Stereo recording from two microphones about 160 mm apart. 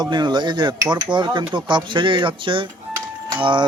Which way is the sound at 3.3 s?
30° right (ahead or behind).